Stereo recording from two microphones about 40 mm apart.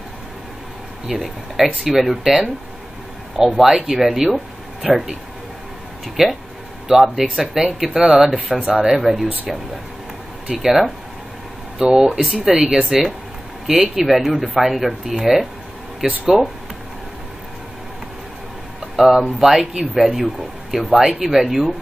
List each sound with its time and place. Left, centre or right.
1.0 s speech: centre
3.5 s speech: centre
6.2 s speech: centre
10.5 s speech: centre
12.3 s speech: right
12.5 s speech: centre
18.9 s speech: centre